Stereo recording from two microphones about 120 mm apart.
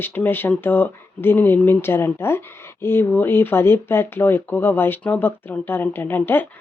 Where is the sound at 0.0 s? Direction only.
15° left (ahead or behind).